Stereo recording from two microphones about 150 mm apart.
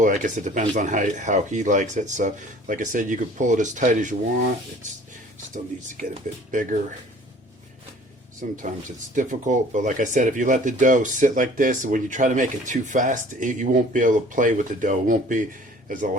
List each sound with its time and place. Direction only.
0.0 s speech: 55° right (ahead or behind)
6.0 s speech: 55° right (ahead or behind)
9.1 s speech: 55° right (ahead or behind)